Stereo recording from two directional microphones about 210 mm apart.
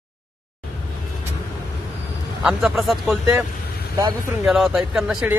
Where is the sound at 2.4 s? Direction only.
5° right (ahead or behind).